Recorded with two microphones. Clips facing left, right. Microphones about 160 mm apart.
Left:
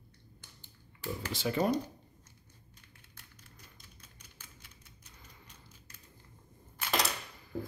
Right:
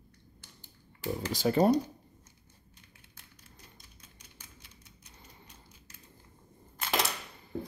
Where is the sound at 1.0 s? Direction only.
40° right (ahead or behind).